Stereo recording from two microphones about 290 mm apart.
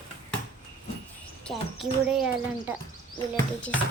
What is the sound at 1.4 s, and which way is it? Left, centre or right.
A child's voice, centre.